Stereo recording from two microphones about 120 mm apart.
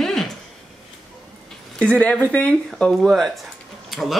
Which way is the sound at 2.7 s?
Centre (ahead or behind).